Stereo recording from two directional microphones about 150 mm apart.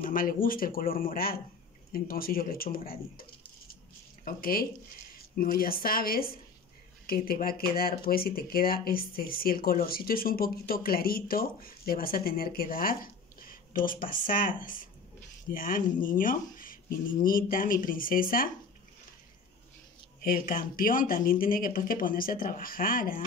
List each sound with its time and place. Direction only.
0.0 s speech: 70° left (ahead or behind)
20.2 s speech: 70° left (ahead or behind)